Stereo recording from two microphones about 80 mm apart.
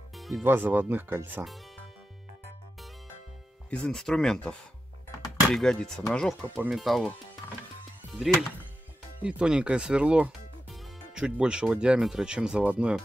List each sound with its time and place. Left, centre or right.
0.1 s music: centre
0.4 s speech: right
3.7 s speech: centre
6.7 s speech: centre
8.1 s speech: centre
10.7 s music: centre
11.7 s speech: centre